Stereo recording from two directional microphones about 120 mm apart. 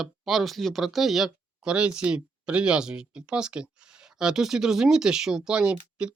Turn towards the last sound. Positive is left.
turn(degrees=-10)  # may be behind; listen again after turning